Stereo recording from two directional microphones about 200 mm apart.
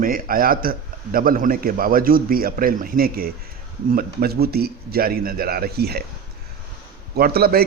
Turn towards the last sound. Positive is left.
turn(degrees=-50)  # may be behind; listen again after turning